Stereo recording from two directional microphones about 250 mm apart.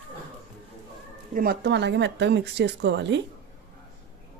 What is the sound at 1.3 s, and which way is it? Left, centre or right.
Speech, right.